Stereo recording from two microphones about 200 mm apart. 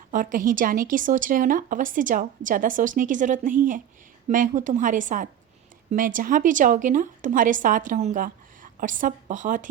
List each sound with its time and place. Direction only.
0.1 s a woman's voice: 40° right (ahead or behind)